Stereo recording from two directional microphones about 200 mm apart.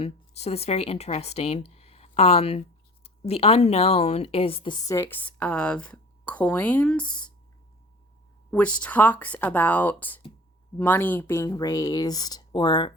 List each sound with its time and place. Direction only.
0.0 s speech: 30° left (ahead or behind); by 7.3 s 5° left (ahead or behind)
8.4 s speech: 5° left (ahead or behind)